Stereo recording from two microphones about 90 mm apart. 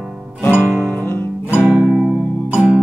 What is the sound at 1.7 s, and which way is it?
Music, 5° right (ahead or behind).